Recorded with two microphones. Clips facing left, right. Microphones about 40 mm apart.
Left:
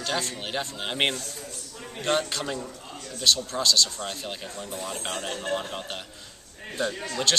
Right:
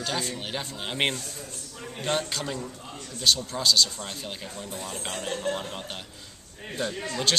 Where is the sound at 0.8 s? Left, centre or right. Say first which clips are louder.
Even; centre.